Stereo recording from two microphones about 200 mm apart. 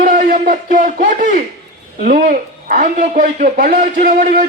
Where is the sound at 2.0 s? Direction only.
40° right (ahead or behind).